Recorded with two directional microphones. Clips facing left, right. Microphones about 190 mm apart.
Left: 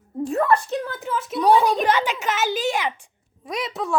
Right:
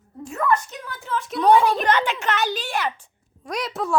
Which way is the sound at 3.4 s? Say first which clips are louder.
Even; centre (ahead or behind).